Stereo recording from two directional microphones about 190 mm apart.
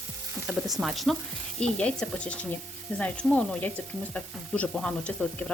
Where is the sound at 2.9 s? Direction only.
5° left (ahead or behind).